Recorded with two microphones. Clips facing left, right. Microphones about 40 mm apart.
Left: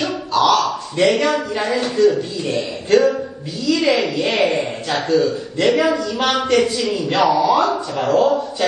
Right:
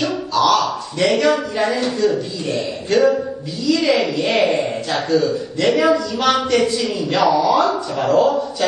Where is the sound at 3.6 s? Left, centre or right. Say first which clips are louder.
Even; left.